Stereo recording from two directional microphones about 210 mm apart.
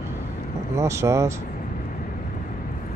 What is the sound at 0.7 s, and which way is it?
Speech, 15° right (ahead or behind).